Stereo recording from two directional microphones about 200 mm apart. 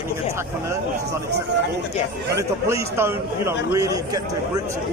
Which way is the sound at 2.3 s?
15° right (ahead or behind).